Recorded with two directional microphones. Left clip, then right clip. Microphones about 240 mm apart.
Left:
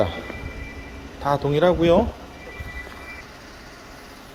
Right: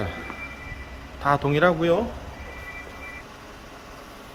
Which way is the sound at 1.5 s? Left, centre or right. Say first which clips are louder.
Left 5 dB; centre.